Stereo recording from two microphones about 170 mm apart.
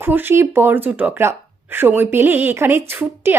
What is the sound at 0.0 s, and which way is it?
A woman's voice, 10° right (ahead or behind).